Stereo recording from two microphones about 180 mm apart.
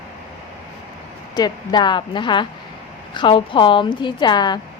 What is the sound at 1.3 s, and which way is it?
A woman's voice, 25° left (ahead or behind).